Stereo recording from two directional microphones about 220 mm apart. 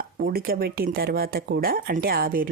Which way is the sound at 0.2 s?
40° right (ahead or behind).